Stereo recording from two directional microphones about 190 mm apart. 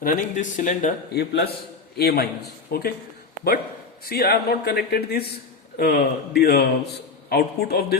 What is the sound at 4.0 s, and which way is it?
A man's voice, 55° left (ahead or behind).